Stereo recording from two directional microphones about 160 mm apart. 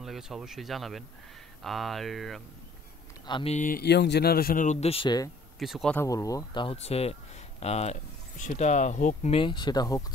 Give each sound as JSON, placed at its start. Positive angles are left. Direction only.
{"t": 0.0, "sound": "speech", "side_deg": 0}
{"t": 3.3, "sound": "speech", "side_deg": 30}
{"t": 3.5, "sound": "speech", "side_deg": 60}
{"t": 4.6, "sound": "speech", "side_deg": 40}
{"t": 5.6, "sound": "speech", "side_deg": 0}
{"t": 5.9, "sound": "speech", "side_deg": 20}